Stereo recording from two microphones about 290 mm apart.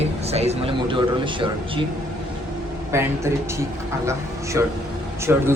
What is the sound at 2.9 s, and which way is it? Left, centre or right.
Speech, centre.